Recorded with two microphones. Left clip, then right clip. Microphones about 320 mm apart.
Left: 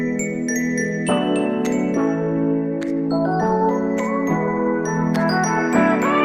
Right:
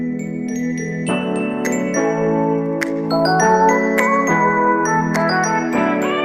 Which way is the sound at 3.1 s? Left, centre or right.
Right.